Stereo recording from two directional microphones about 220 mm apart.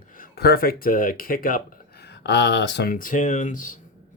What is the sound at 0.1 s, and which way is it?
Speech, 45° left (ahead or behind).